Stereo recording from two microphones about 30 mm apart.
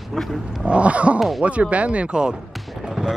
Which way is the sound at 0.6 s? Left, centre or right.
Right.